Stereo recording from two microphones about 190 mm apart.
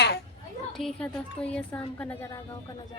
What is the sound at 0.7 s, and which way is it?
A woman's voice, centre (ahead or behind).